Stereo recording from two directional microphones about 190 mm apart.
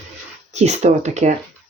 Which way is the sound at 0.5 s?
35° right (ahead or behind).